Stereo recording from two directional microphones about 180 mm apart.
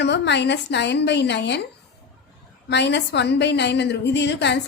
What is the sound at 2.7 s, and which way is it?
A woman's voice, 75° left (ahead or behind).